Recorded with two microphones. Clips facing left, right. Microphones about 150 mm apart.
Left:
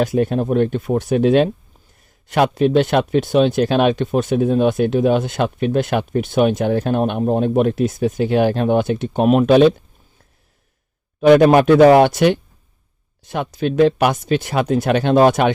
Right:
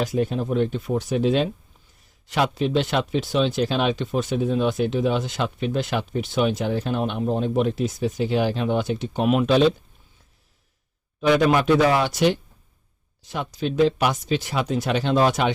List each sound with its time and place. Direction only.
0.0 s speech: 60° left (ahead or behind)
11.2 s speech: 55° left (ahead or behind)